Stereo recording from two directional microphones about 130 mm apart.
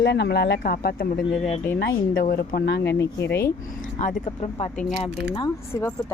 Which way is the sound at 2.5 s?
90° left.